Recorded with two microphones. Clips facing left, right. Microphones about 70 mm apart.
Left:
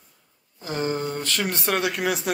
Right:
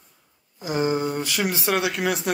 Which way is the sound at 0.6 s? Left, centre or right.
Centre.